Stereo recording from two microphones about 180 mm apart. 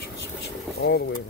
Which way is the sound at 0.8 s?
75° left (ahead or behind).